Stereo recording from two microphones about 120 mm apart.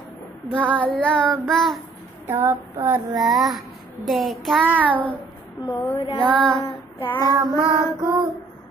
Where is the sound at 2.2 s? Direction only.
20° right (ahead or behind).